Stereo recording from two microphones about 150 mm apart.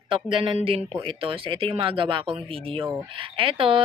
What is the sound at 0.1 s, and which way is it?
Speech, 35° right (ahead or behind).